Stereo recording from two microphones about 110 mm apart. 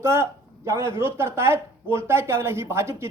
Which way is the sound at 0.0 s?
25° right (ahead or behind).